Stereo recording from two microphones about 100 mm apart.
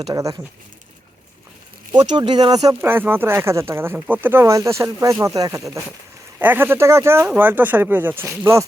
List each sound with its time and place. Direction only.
0.1 s speech: 40° right (ahead or behind)
1.9 s speech: 45° right (ahead or behind)
2.8 s speech: 20° right (ahead or behind)
6.4 s speech: 20° right (ahead or behind)